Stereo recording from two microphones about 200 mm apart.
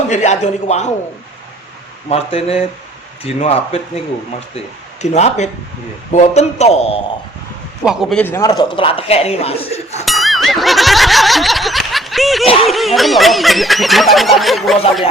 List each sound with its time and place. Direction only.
0.1 s a man's voice: 35° left (ahead or behind)
2.0 s a man's voice: 30° left (ahead or behind)
5.0 s a man's voice: 35° left (ahead or behind)
7.9 s a man's voice: 5° left (ahead or behind); by 10.1 s 30° left (ahead or behind)
10.1 s music: centre (ahead or behind)
12.6 s snicker: centre (ahead or behind)